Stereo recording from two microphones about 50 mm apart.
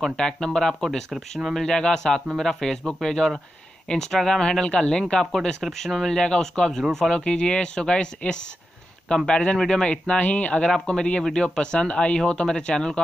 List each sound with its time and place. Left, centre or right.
0.0 s speech: centre
6.1 s speech: centre
7.2 s speech: centre
10.7 s speech: centre